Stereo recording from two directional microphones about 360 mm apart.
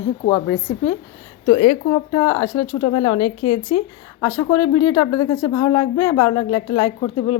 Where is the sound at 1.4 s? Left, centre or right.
Centre.